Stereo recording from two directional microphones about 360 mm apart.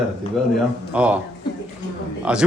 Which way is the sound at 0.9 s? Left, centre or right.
Centre.